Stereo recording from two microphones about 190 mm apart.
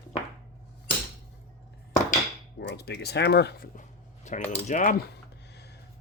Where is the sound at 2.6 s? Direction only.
60° left (ahead or behind); by 5.0 s 40° left (ahead or behind).